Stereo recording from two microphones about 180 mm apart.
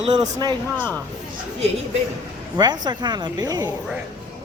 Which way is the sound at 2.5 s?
25° right (ahead or behind).